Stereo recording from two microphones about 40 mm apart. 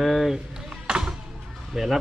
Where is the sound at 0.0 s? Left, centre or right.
Centre.